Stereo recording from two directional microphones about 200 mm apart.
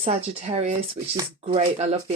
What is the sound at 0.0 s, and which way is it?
Speech, 30° right (ahead or behind).